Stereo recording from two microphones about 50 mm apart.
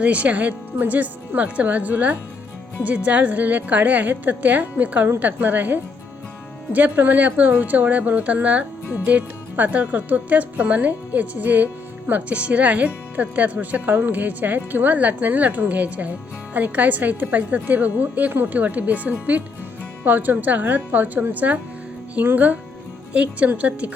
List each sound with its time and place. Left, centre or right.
0.0 s speech: right